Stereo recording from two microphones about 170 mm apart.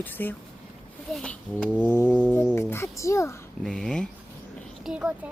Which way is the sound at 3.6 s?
5° left (ahead or behind).